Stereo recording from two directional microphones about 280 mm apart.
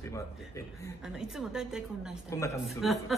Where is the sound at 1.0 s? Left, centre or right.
Centre.